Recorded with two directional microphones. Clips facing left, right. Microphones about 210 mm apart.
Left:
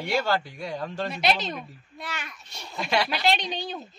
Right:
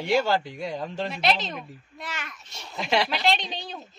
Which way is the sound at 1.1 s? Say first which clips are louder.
Left 1 dB; centre (ahead or behind).